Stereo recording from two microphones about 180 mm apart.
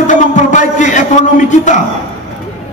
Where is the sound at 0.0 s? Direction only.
45° left (ahead or behind).